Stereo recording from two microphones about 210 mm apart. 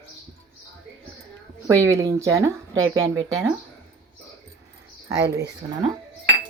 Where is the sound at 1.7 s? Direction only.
15° right (ahead or behind).